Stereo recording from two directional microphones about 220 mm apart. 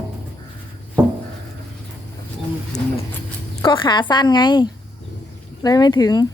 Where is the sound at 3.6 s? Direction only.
20° left (ahead or behind).